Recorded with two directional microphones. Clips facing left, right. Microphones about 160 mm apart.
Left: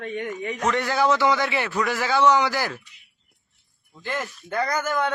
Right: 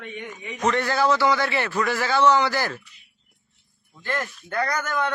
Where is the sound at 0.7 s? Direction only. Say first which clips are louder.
Left 1 dB; 15° left (ahead or behind).